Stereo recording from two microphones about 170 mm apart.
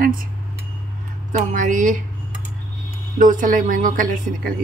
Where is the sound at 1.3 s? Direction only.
50° right (ahead or behind).